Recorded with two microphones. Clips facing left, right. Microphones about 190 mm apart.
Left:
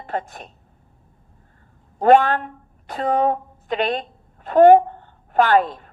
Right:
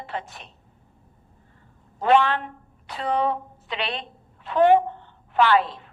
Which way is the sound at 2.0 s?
45° left (ahead or behind).